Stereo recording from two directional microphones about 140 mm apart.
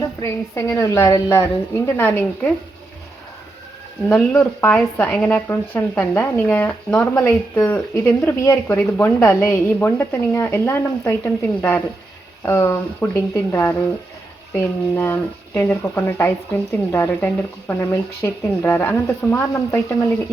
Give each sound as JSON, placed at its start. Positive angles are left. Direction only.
{"t": 0.0, "sound": "a woman's voice", "side_deg": 20}
{"t": 4.1, "sound": "a woman's voice", "side_deg": 10}